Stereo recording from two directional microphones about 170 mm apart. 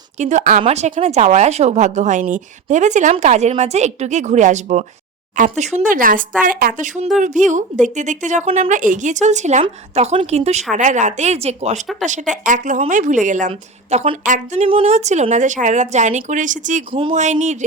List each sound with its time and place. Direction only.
0.2 s a woman's voice: 45° right (ahead or behind)
16.9 s speech: 30° right (ahead or behind)
17.4 s a woman's voice: 45° right (ahead or behind)